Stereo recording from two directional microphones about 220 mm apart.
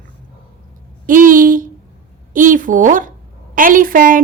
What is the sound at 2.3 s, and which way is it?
Speech, 35° right (ahead or behind).